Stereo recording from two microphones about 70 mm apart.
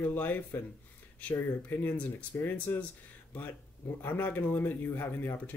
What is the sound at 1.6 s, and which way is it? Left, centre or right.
Speech, left.